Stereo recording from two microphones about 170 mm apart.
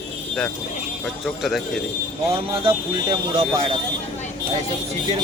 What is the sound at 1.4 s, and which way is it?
Speech, centre (ahead or behind).